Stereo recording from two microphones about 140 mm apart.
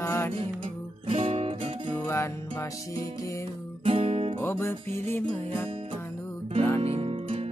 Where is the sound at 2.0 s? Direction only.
20° left (ahead or behind).